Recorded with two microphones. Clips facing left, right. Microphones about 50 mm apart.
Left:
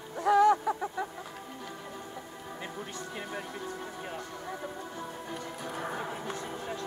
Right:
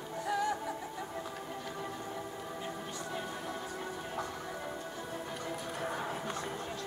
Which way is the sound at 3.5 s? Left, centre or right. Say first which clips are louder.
Even; centre.